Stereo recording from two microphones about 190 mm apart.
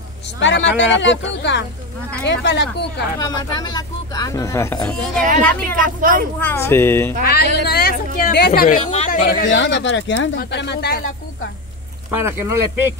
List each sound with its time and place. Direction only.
0.4 s speech: 75° left (ahead or behind)
3.2 s speech: 20° left (ahead or behind)
5.9 s speech: 45° right (ahead or behind)
6.4 s speech: 15° left (ahead or behind)
7.2 s speech: 60° left (ahead or behind); by 9.5 s 40° left (ahead or behind)
9.5 s speech: 70° left (ahead or behind)
12.1 s speech: 15° right (ahead or behind)